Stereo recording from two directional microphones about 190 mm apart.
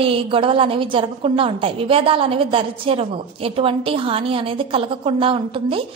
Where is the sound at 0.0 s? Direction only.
30° right (ahead or behind).